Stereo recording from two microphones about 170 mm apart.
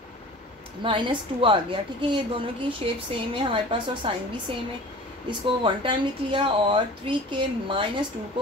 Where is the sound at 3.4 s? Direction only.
30° right (ahead or behind).